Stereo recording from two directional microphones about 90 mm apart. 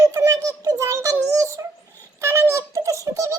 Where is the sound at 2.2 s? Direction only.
30° right (ahead or behind).